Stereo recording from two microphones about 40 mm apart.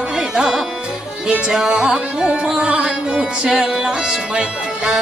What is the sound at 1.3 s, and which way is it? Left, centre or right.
Music, right.